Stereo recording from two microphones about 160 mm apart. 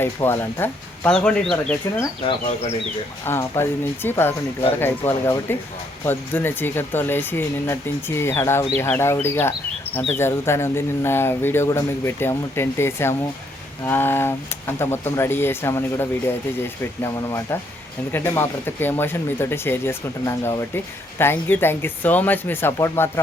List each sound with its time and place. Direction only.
0.0 s speech: 15° left (ahead or behind)
2.2 s speech: 35° left (ahead or behind)
3.2 s speech: 15° left (ahead or behind)